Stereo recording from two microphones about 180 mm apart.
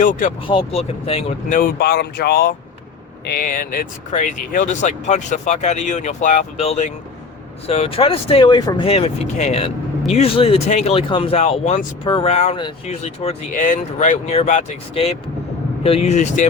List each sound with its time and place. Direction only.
0.0 s speech: 45° left (ahead or behind)
0.4 s speech: 30° left (ahead or behind)
1.5 s speech: 50° left (ahead or behind)